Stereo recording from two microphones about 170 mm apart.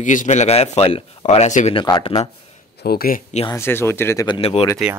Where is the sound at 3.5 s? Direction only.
15° left (ahead or behind).